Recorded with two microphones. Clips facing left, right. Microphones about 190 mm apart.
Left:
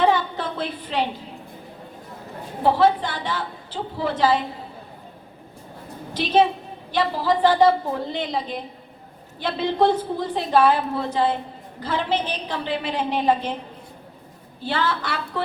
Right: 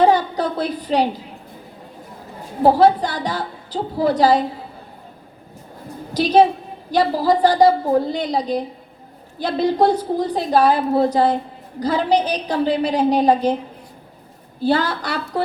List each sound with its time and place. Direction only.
0.0 s a sound: 40° right (ahead or behind)
2.6 s a woman's voice: 40° right (ahead or behind)
6.1 s a woman's voice: 40° right (ahead or behind)
14.6 s a woman's voice: 40° right (ahead or behind)